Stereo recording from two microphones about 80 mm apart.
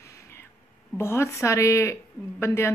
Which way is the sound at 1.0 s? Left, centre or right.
Left.